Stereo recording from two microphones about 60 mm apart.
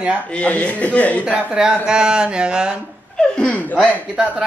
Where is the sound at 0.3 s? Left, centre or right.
Left.